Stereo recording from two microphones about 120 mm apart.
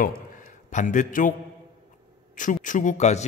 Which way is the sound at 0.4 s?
90° left.